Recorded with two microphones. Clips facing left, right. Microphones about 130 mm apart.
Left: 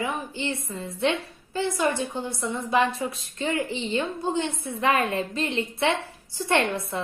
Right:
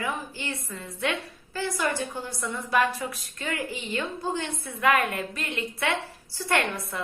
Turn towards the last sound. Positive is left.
turn(degrees=25)  # may be behind; listen again after turning